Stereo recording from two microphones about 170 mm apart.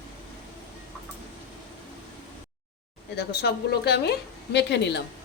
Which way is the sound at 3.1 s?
70° left (ahead or behind).